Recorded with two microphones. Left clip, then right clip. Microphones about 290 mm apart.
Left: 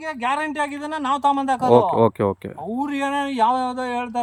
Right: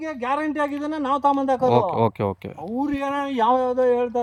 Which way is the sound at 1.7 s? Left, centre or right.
Centre.